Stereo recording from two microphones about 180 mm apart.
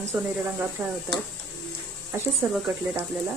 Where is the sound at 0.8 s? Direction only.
15° right (ahead or behind).